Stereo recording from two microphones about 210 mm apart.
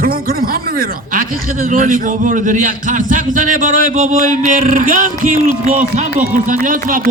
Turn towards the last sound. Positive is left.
turn(degrees=-40)  # may be behind; listen again after turning